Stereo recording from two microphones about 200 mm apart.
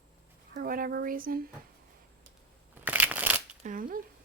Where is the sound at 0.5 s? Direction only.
45° right (ahead or behind).